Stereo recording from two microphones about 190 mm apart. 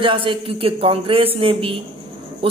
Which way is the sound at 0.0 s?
25° right (ahead or behind).